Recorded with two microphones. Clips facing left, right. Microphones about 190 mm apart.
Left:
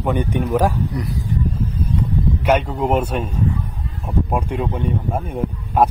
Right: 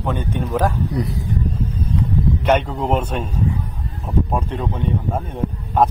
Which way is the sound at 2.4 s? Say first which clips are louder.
Left 1 dB; 5° left (ahead or behind).